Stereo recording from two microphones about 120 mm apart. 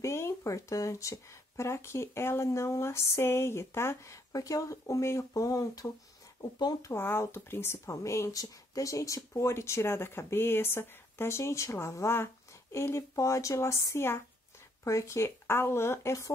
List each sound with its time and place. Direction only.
0.0 s speech: 25° left (ahead or behind)
6.9 s speech: 20° left (ahead or behind)